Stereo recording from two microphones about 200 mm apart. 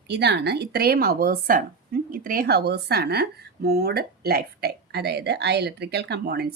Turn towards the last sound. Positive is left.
turn(degrees=-50)  # may be behind; listen again after turning